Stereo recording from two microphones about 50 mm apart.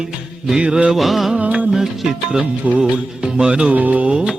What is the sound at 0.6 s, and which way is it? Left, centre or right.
Music, right.